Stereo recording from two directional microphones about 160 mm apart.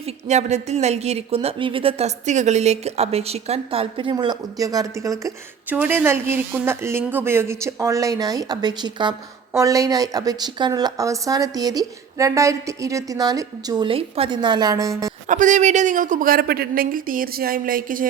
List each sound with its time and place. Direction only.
0.3 s a woman's voice: 45° right (ahead or behind); by 15.1 s 20° right (ahead or behind)
15.3 s a woman's voice: 50° right (ahead or behind)